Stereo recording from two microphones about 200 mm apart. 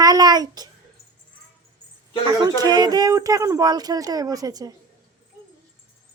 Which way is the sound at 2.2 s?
20° right (ahead or behind).